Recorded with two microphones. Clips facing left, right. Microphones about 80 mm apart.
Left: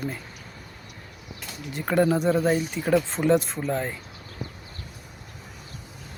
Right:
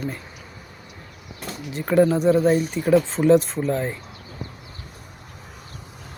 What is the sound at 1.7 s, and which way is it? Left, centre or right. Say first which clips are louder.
Speech: right 4 dB; centre.